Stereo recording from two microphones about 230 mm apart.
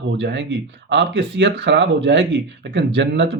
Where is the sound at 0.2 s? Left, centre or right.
Right.